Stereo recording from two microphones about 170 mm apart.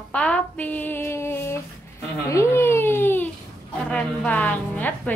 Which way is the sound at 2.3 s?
15° left (ahead or behind).